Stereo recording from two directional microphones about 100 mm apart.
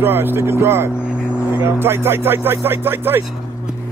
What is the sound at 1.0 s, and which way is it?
Vehicle, 10° right (ahead or behind).